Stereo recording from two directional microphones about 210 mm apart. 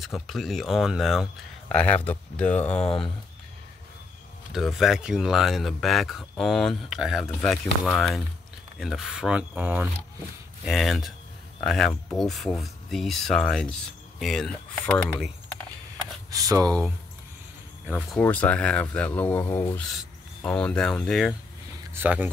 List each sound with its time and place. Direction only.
0.0 s speech: centre (ahead or behind)
4.5 s speech: centre (ahead or behind)
16.3 s speech: 15° right (ahead or behind)
17.8 s speech: 5° right (ahead or behind)
18.2 s speech: 5° left (ahead or behind)
21.9 s speech: 10° right (ahead or behind)